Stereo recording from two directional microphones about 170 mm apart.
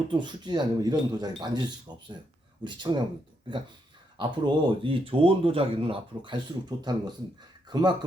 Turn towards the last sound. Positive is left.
turn(degrees=-25)  # may be behind; listen again after turning